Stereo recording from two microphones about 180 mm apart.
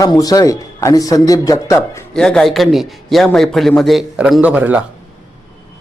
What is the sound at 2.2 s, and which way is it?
A man's voice, 5° left (ahead or behind).